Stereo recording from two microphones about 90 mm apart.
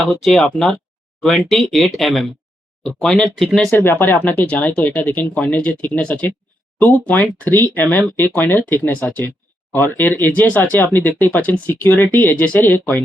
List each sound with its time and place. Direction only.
0.0 s speech: centre (ahead or behind)
3.7 s speech: 25° left (ahead or behind)